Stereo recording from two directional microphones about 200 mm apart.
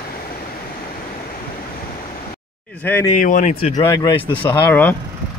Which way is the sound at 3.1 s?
40° left (ahead or behind).